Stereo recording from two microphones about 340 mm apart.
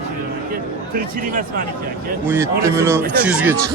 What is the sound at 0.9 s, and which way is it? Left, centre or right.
Speech, right.